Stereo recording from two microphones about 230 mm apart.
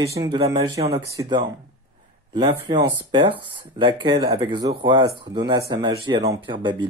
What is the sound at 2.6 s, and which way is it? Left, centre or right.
Speech, centre.